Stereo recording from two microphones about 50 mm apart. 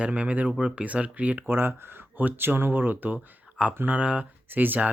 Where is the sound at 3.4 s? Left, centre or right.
Right.